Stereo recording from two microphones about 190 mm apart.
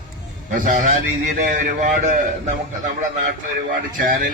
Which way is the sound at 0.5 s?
45° right (ahead or behind).